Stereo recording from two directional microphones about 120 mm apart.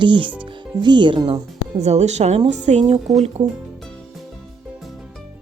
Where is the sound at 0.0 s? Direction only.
40° right (ahead or behind).